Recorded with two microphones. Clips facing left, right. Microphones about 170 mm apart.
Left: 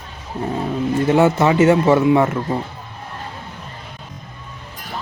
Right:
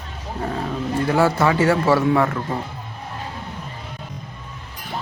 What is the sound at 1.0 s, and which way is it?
A man's voice, 20° left (ahead or behind).